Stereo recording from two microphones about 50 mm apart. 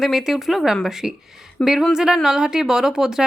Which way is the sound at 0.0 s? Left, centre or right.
Centre.